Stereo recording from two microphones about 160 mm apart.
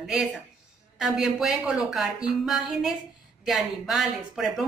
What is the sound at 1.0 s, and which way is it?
Speech, centre (ahead or behind).